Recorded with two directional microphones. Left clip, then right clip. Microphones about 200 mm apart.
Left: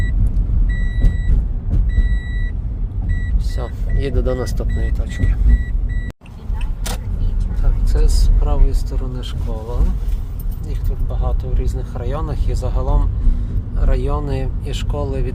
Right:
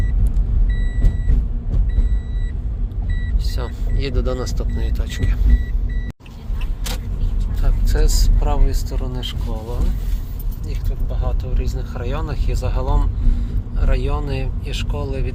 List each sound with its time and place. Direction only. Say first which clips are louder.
3.6 s speech: left 3 dB; 15° left (ahead or behind)
4.9 s speech: even; 5° left (ahead or behind)
7.6 s speech: right 2 dB; centre (ahead or behind)
11.1 s speech: left 2 dB; 15° left (ahead or behind)